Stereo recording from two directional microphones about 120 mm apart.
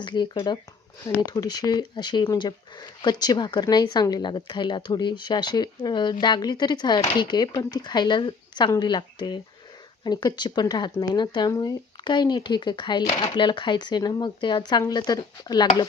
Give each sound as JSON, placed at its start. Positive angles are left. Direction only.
{"t": 0.0, "sound": "speech", "side_deg": 40}